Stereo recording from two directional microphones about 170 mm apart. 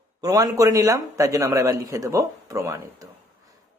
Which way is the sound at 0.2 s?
20° right (ahead or behind).